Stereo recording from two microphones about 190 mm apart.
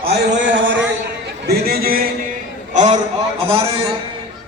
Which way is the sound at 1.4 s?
55° right (ahead or behind).